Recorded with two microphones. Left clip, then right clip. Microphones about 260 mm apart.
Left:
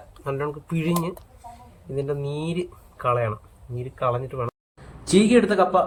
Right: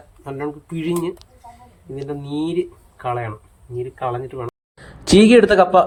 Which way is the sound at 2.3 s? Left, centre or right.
Right.